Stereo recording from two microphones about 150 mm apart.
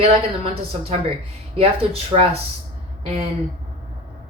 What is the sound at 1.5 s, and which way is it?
Speech, 40° right (ahead or behind).